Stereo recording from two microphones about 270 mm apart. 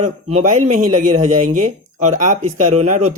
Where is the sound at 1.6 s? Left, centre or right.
Right.